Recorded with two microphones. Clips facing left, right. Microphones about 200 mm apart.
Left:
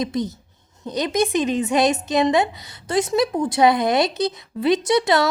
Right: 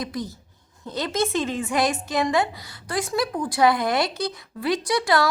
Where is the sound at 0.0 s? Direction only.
20° left (ahead or behind).